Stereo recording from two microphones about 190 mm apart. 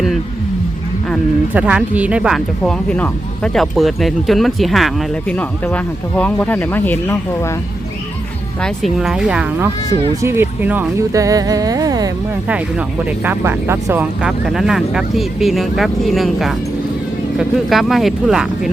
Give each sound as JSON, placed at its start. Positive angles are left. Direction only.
{"t": 1.5, "sound": "speech", "side_deg": -5}
{"t": 8.6, "sound": "speech", "side_deg": 0}